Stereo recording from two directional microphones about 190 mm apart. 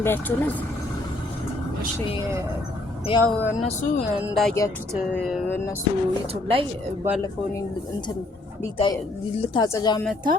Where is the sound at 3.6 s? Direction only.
40° left (ahead or behind).